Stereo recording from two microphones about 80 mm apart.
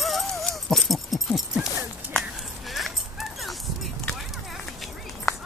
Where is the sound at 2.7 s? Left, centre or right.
Centre.